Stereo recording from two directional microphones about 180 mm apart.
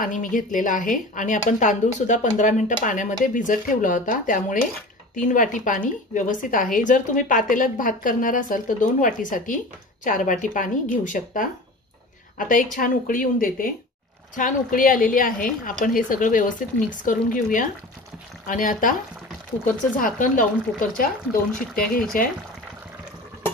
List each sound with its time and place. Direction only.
0.0 s a woman's voice: 45° left (ahead or behind)